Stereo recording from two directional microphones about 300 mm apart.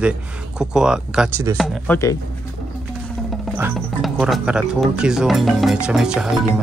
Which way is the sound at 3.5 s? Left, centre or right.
Centre.